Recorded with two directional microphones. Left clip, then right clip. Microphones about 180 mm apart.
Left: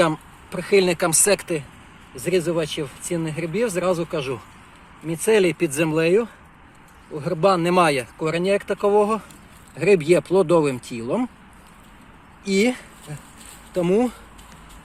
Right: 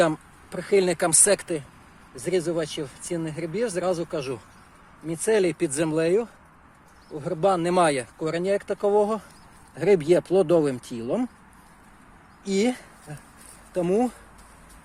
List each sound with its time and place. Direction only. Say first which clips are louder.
0.0 s speech: left 2 dB; 35° right (ahead or behind)
12.5 s speech: left 4 dB; 30° right (ahead or behind)